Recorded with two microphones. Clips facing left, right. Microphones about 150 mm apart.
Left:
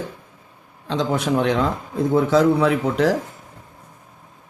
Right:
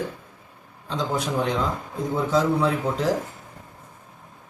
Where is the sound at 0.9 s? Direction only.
75° left (ahead or behind).